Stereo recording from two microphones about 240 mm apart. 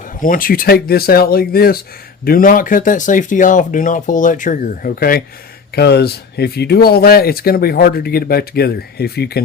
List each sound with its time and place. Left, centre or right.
0.2 s speech: left